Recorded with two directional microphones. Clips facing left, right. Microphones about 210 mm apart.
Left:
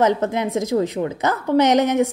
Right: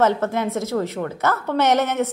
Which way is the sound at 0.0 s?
15° left (ahead or behind).